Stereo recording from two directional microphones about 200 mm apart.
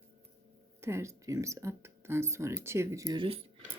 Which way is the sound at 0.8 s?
15° right (ahead or behind).